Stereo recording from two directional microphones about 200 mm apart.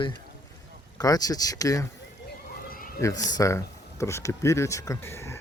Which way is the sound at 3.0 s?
15° left (ahead or behind).